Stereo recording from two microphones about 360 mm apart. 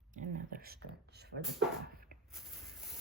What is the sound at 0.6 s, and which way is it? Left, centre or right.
Speech, right.